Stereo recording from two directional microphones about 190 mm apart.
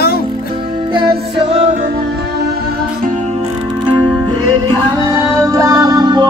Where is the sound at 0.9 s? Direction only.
25° right (ahead or behind).